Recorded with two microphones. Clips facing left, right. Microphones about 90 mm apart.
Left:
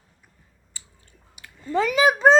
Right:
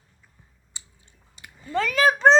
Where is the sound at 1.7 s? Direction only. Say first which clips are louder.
Left 2 dB; 15° left (ahead or behind).